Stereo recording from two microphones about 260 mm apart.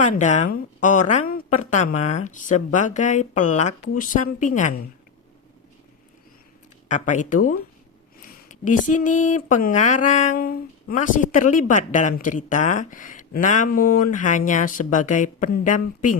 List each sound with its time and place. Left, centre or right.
0.0 s speech: left
6.8 s speech: left